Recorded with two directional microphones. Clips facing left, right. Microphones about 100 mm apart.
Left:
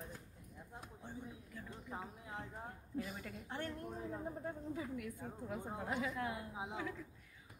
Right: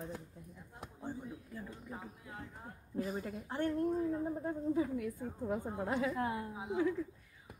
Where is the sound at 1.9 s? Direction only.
25° left (ahead or behind).